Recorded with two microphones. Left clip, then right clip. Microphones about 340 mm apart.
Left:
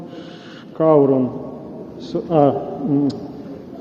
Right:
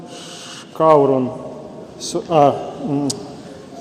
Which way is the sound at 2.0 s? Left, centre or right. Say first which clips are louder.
Right 2 dB; centre.